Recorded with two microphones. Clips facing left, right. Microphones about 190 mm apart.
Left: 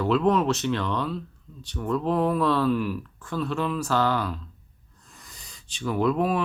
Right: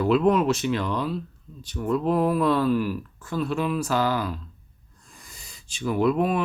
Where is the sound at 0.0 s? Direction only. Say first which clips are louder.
Right 2 dB; 10° right (ahead or behind).